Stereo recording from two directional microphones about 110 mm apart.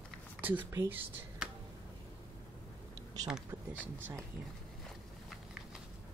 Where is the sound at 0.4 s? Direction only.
15° right (ahead or behind).